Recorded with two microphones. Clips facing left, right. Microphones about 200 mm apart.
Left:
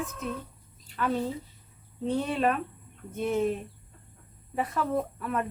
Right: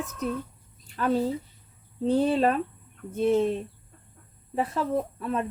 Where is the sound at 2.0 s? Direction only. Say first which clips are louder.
Right 5 dB; 30° right (ahead or behind).